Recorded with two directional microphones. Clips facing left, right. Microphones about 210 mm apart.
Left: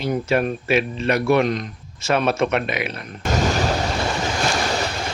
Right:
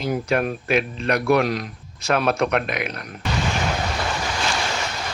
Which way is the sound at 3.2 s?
45° left (ahead or behind).